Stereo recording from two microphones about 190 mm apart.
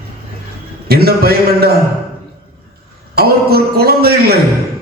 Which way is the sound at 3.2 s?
55° right (ahead or behind).